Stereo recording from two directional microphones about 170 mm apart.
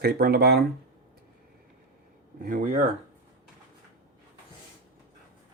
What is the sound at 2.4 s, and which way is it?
Speech, 50° right (ahead or behind).